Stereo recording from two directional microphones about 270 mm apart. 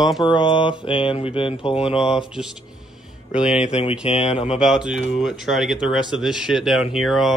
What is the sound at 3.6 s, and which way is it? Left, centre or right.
Speech, left.